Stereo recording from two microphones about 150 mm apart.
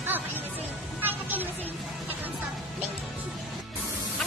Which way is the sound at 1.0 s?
10° right (ahead or behind).